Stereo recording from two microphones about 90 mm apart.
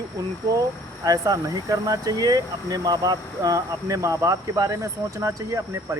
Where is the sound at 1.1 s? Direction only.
45° right (ahead or behind).